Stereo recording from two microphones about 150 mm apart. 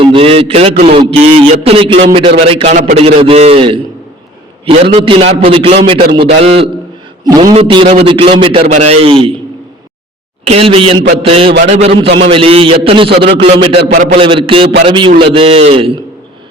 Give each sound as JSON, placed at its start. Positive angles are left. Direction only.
{"t": 0.0, "sound": "a man's voice", "side_deg": -35}
{"t": 7.3, "sound": "a man's voice", "side_deg": -25}
{"t": 10.4, "sound": "a man's voice", "side_deg": -40}
{"t": 13.9, "sound": "a man's voice", "side_deg": -60}
{"t": 14.2, "sound": "a man's voice", "side_deg": -35}